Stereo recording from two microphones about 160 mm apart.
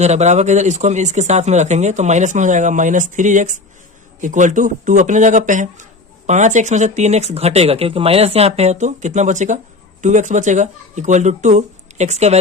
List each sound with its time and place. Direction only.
0.0 s speech: 45° right (ahead or behind)